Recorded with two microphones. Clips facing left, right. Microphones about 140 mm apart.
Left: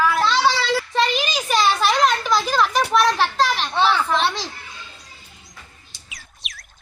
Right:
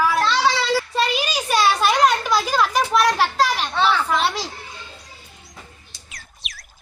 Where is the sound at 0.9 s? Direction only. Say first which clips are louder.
Left 1 dB; 10° right (ahead or behind).